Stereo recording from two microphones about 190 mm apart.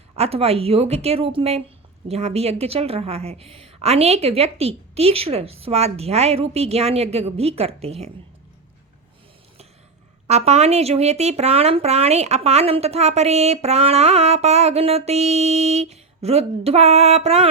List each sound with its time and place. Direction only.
0.2 s speech: 30° right (ahead or behind)
10.2 s speech: 35° right (ahead or behind)